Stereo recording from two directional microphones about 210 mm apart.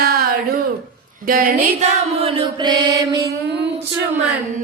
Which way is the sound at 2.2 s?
25° right (ahead or behind).